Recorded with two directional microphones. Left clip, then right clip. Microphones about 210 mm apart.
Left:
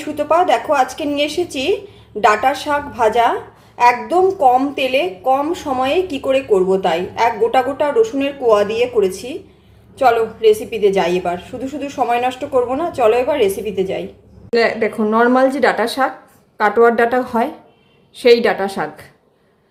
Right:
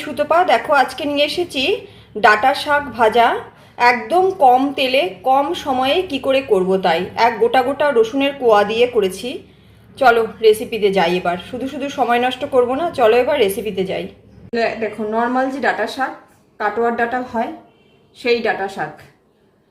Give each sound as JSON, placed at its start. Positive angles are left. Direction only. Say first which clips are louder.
{"t": 0.0, "sound": "a woman's voice", "louder": "even", "side_deg": -5}
{"t": 14.5, "sound": "speech", "louder": "left 4 dB", "side_deg": 45}